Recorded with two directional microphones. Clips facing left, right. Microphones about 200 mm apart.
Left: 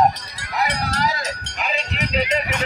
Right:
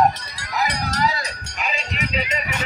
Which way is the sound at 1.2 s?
65° left (ahead or behind).